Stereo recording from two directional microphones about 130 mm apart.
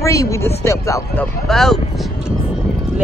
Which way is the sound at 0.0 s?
25° left (ahead or behind).